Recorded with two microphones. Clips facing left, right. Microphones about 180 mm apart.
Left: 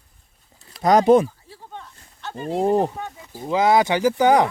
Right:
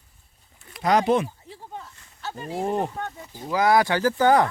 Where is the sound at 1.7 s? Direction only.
5° right (ahead or behind).